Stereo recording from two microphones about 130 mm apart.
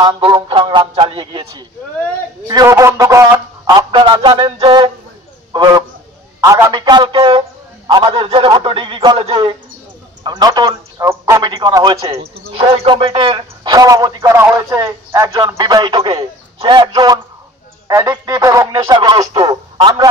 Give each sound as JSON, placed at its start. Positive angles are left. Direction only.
{"t": 0.0, "sound": "a man's voice", "side_deg": -40}
{"t": 2.4, "sound": "a man's voice", "side_deg": -25}
{"t": 5.5, "sound": "a man's voice", "side_deg": -30}
{"t": 13.7, "sound": "a man's voice", "side_deg": -25}